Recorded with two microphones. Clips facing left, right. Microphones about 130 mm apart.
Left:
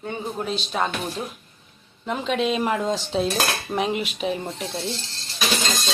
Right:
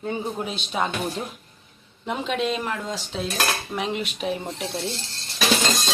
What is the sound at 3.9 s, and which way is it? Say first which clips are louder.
Speech: left 2 dB; centre (ahead or behind).